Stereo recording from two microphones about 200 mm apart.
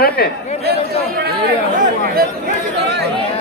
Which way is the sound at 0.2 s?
55° left (ahead or behind).